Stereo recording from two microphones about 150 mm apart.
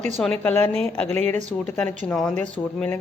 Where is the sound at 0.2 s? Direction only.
10° left (ahead or behind).